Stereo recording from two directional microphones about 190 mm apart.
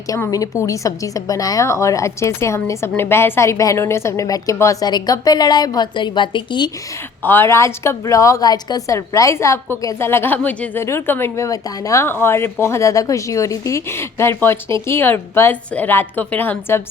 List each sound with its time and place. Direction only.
0.1 s a woman's voice: 20° left (ahead or behind)
7.2 s a woman's voice: 10° left (ahead or behind)